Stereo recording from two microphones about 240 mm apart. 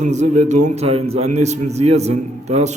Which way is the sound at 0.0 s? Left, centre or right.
Right.